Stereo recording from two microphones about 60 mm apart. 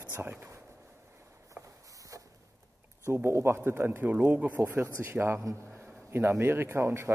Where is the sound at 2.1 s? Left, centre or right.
Right.